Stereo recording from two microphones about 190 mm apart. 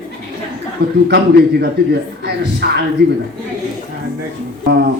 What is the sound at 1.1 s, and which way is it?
Speech, 60° right (ahead or behind).